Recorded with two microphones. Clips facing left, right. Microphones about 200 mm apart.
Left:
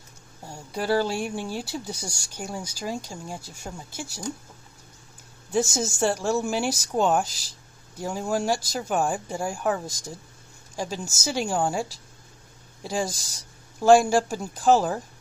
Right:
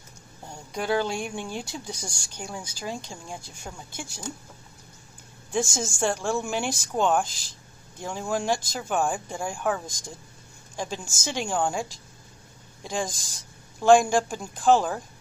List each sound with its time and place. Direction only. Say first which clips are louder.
0.5 s speech: left 2 dB; 5° left (ahead or behind)
5.5 s speech: left 3 dB; 5° left (ahead or behind)
7.2 s speech: even; 40° left (ahead or behind)
8.0 s speech: left 2 dB; 10° left (ahead or behind)